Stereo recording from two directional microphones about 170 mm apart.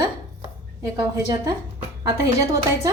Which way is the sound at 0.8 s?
20° right (ahead or behind).